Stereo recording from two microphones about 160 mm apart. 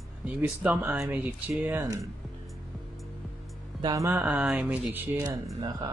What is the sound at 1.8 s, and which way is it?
Speech, 20° right (ahead or behind).